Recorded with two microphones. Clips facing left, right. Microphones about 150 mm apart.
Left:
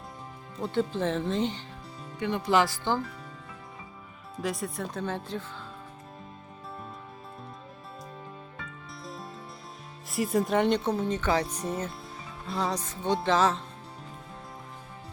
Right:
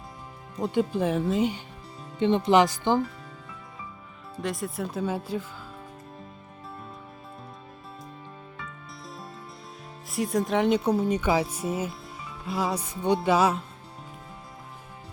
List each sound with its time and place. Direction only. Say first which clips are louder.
0.6 s speech: right 3 dB; 15° right (ahead or behind)
2.1 s speech: right 5 dB; 25° right (ahead or behind)
4.4 s speech: right 1 dB; centre (ahead or behind)
10.1 s speech: even; centre (ahead or behind)